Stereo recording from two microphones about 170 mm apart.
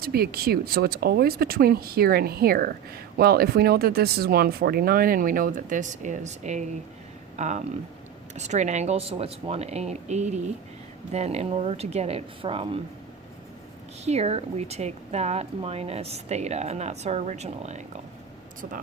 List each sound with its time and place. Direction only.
0.0 s speech: 65° right (ahead or behind); by 12.8 s 30° right (ahead or behind)
14.0 s speech: 40° right (ahead or behind)